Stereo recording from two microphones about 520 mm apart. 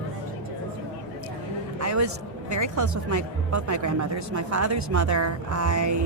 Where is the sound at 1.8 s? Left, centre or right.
Right.